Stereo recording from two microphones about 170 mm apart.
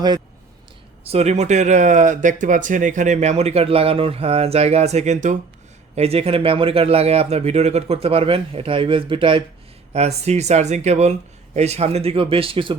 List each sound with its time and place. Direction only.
1.0 s speech: 40° right (ahead or behind)